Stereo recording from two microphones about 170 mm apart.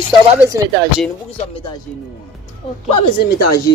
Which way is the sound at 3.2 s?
65° left (ahead or behind).